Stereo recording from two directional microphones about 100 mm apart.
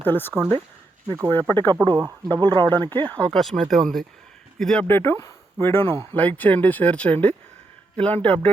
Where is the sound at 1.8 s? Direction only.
30° right (ahead or behind).